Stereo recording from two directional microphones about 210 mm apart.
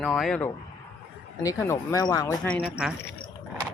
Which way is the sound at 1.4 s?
15° left (ahead or behind).